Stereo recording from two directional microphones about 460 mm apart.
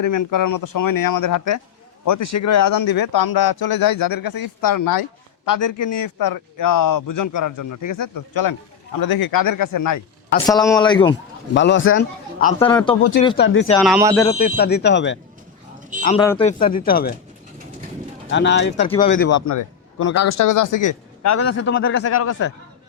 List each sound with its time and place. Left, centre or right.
0.0 s a man's voice: left
2.7 s a man's voice: left
10.4 s a man's voice: centre
11.5 s a man's voice: left
13.2 s a man's voice: left
13.7 s speech: centre
14.2 s a man's voice: centre
16.0 s a man's voice: centre
18.3 s a man's voice: left
19.3 s a man's voice: left
21.4 s a man's voice: left